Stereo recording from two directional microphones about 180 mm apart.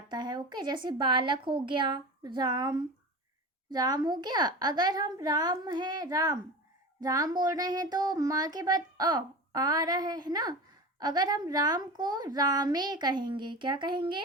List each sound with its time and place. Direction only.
0.1 s speech: 25° right (ahead or behind)